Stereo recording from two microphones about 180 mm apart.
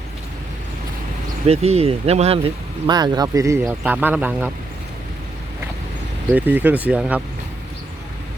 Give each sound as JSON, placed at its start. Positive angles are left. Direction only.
{"t": 1.5, "sound": "speech", "side_deg": -35}
{"t": 6.3, "sound": "speech", "side_deg": -10}